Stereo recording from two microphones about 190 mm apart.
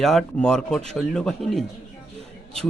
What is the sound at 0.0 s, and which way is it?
Speech, centre (ahead or behind).